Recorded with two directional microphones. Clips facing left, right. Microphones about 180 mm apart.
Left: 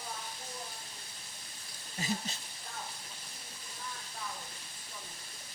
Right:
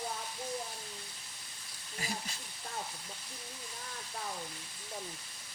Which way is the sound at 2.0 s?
25° left (ahead or behind).